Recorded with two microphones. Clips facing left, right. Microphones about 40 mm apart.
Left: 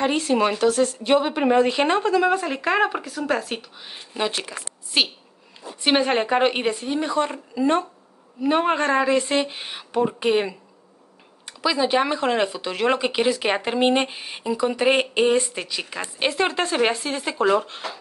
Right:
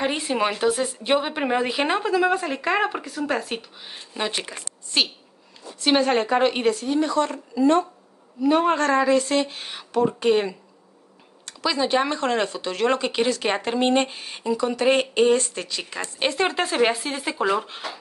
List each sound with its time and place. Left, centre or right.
0.0 s a woman's voice: centre
5.8 s speech: centre